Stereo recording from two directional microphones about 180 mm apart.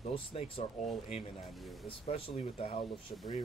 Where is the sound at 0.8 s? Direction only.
Centre (ahead or behind).